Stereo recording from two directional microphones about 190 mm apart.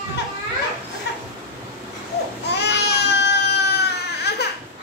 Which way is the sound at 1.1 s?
60° left (ahead or behind).